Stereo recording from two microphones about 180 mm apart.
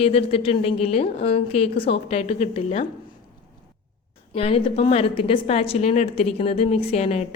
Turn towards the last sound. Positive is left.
turn(degrees=35)  # may be behind; listen again after turning